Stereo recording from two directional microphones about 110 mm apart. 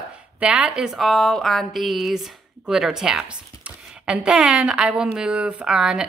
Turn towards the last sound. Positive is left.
turn(degrees=-5)  # may be behind; listen again after turning